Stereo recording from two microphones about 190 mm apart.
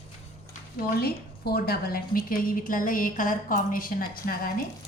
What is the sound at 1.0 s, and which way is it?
A woman's voice, 55° left (ahead or behind).